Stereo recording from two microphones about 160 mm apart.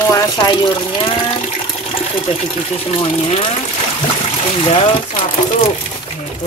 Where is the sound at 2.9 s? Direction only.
35° left (ahead or behind).